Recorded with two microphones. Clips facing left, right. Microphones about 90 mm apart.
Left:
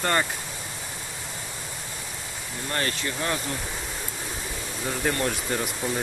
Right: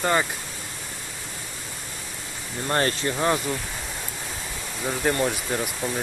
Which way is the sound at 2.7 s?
35° right (ahead or behind).